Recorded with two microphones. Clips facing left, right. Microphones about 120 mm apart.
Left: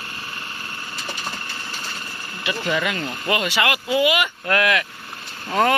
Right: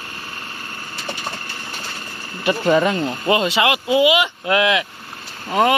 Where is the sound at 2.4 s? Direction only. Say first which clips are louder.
Right 8 dB; 40° right (ahead or behind); by 4.8 s 20° right (ahead or behind).